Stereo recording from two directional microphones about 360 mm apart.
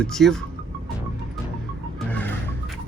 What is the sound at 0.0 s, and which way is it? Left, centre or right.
Speech, centre.